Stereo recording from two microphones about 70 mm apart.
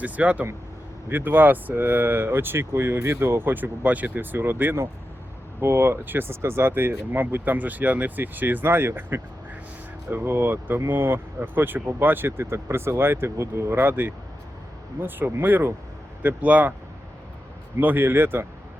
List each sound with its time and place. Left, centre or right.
0.0 s speech: centre
17.7 s speech: right